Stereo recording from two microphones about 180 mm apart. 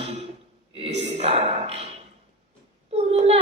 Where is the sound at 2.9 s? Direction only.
35° right (ahead or behind).